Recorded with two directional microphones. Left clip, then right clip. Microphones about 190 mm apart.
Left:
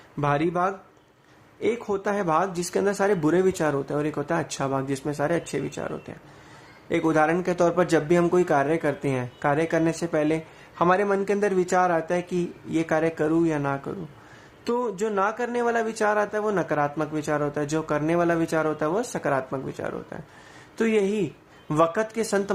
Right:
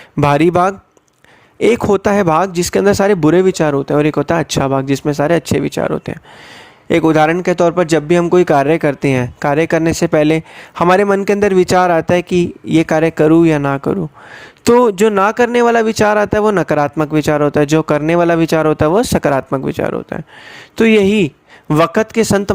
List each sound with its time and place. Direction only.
0.2 s a man's voice: 60° right (ahead or behind)